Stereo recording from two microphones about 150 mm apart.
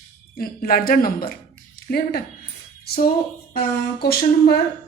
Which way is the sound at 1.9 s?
90° left.